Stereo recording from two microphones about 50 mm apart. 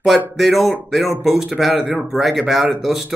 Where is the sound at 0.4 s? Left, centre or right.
Centre.